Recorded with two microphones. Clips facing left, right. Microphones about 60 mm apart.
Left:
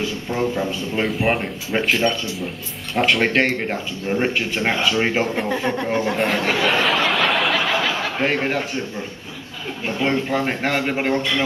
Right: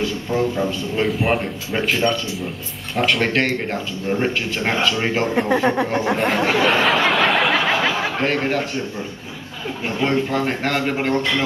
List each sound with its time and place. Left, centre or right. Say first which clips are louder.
0.3 s a man's voice: right 1 dB; centre
5.6 s speech: right 4 dB; centre
6.1 s speech: right 2 dB; centre
7.1 s a sound: right 2 dB; centre
7.6 s a sound: right 2 dB; right
8.2 s a man's voice: left 1 dB; centre
10.3 s a man's voice: even; centre